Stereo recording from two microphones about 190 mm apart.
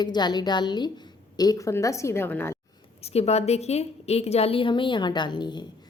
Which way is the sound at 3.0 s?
30° left (ahead or behind).